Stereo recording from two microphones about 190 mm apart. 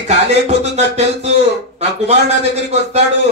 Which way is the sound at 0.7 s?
35° right (ahead or behind).